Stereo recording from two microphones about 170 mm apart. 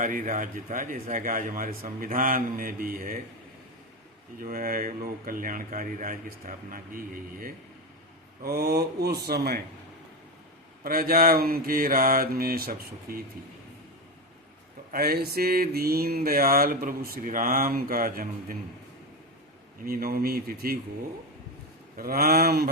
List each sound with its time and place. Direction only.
0.0 s speech: 50° right (ahead or behind)
1.1 s mantra: 55° right (ahead or behind)
4.4 s speech: 55° right (ahead or behind)
6.9 s mantra: 55° right (ahead or behind)
8.4 s mantra: 65° right (ahead or behind)
10.8 s mantra: 60° right (ahead or behind)
14.9 s mantra: 60° right (ahead or behind)
19.8 s mantra: 60° right (ahead or behind)
21.9 s mantra: 60° right (ahead or behind)